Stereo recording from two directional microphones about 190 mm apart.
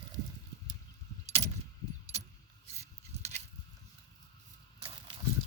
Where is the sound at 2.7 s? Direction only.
35° right (ahead or behind).